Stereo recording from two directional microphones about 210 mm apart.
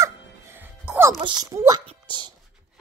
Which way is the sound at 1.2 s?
15° right (ahead or behind).